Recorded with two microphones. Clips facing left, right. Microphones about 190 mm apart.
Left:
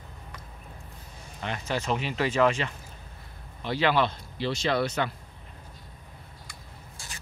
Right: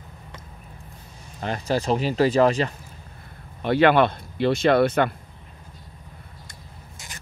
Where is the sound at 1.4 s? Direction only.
40° right (ahead or behind).